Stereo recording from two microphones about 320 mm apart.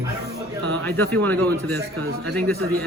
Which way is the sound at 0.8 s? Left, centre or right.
Centre.